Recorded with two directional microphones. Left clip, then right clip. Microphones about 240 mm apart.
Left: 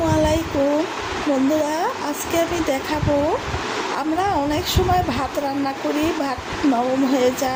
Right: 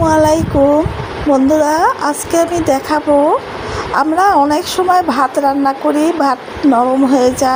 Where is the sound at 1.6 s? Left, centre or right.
Right.